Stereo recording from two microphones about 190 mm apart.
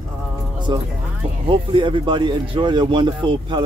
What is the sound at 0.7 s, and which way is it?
Speech, 25° right (ahead or behind).